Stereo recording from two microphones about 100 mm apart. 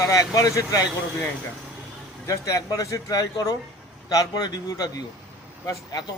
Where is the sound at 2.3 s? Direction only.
35° left (ahead or behind).